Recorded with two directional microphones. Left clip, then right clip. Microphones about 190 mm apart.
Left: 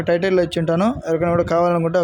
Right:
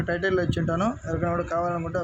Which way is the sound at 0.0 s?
30° left (ahead or behind).